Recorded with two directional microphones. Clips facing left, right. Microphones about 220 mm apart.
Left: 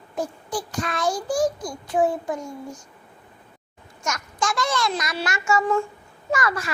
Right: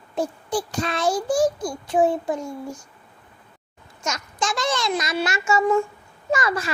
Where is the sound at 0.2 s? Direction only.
25° right (ahead or behind).